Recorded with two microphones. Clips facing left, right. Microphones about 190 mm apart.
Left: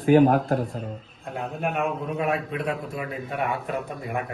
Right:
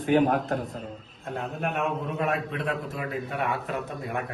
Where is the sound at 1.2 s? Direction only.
Centre (ahead or behind).